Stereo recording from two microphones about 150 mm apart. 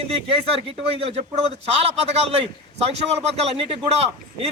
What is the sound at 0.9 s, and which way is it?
A man's voice, 40° right (ahead or behind).